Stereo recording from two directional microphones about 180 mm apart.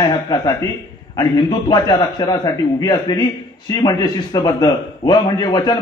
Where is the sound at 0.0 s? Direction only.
20° left (ahead or behind).